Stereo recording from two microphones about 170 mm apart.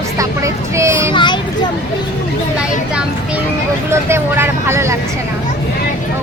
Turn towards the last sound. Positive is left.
turn(degrees=-15)  # may be behind; listen again after turning